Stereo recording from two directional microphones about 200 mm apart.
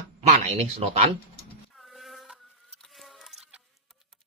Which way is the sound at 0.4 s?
35° right (ahead or behind).